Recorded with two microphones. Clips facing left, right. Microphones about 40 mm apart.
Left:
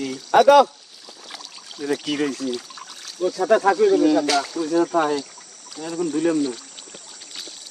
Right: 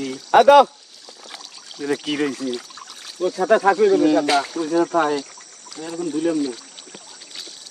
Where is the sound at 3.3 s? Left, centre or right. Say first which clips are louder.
Right 1 dB; right; by 5.9 s centre.